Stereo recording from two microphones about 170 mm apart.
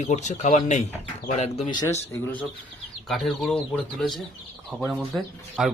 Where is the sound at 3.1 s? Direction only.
Centre (ahead or behind).